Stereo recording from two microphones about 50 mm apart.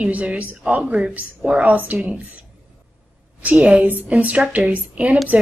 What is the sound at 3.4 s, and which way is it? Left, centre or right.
Speech, right.